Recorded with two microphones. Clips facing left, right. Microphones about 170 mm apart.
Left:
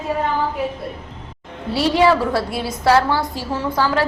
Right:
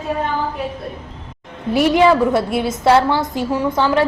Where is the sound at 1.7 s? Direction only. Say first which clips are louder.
Right 3 dB; 20° right (ahead or behind).